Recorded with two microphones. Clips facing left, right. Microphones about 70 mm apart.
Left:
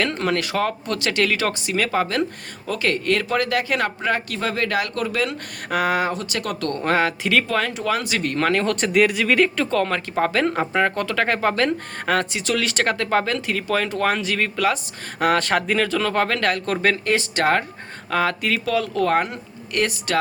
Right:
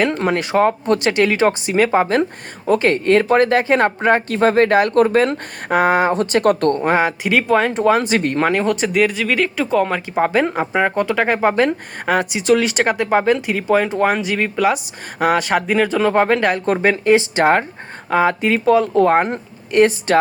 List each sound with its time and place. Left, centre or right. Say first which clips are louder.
0.0 s speech: right 4 dB; right
6.1 s speech: right 11 dB; right
6.7 s speech: right 5 dB; centre
7.7 s speech: right 8 dB; right